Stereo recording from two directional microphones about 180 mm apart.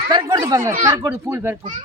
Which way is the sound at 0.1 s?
25° right (ahead or behind).